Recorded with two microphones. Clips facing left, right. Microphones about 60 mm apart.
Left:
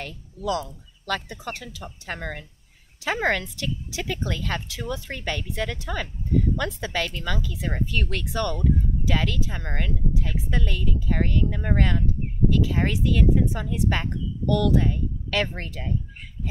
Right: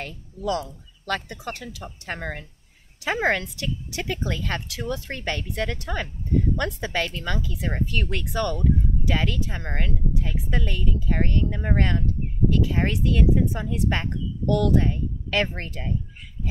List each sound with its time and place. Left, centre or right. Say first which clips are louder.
0.0 s speech: right 1 dB; centre
4.5 s speech: right 1 dB; centre